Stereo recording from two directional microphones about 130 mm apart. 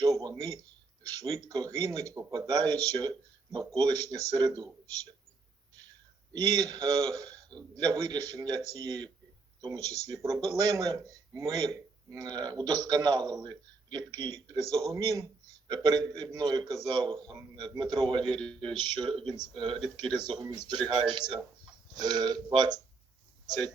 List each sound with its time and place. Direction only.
0.0 s a sound: 30° right (ahead or behind)
1.2 s a man's voice: 30° right (ahead or behind)
6.3 s a man's voice: 30° right (ahead or behind)